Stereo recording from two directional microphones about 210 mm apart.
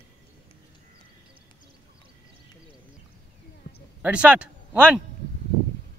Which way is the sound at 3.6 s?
55° left (ahead or behind).